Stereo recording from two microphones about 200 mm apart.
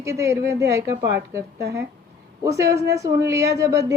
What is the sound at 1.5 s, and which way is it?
Speech, 55° right (ahead or behind).